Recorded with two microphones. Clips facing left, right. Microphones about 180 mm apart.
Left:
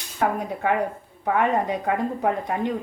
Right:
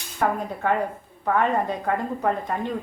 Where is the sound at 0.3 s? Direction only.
15° left (ahead or behind).